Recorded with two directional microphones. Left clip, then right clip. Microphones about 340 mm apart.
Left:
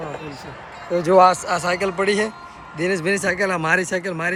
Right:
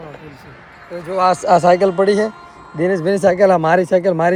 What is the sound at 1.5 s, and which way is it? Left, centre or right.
Speech, centre.